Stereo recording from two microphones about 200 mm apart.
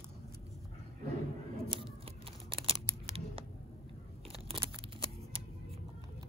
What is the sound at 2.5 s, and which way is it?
Scissors, 25° right (ahead or behind).